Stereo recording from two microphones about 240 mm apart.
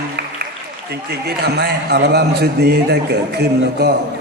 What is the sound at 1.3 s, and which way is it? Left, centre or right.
A man's voice, right.